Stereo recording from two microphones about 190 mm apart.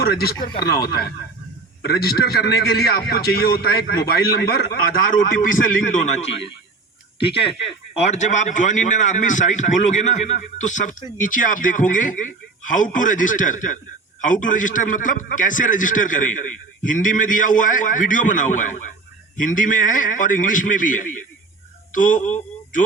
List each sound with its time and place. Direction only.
0.0 s a man's voice: 55° left (ahead or behind)
7.9 s a man's voice: 35° left (ahead or behind)